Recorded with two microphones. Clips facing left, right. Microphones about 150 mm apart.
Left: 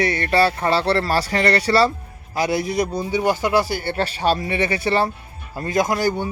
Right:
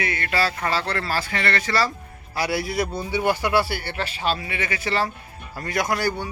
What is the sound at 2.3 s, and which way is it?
Speech, 20° left (ahead or behind).